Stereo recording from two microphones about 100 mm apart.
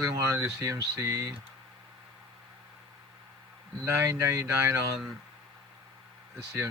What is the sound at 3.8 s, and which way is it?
Speech, 30° right (ahead or behind).